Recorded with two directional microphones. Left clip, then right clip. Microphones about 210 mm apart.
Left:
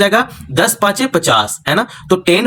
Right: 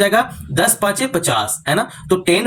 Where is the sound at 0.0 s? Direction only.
30° left (ahead or behind).